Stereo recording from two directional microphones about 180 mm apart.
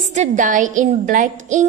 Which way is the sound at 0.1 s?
45° right (ahead or behind).